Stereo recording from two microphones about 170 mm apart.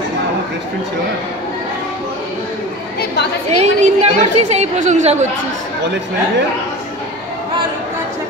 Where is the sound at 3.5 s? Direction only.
40° right (ahead or behind).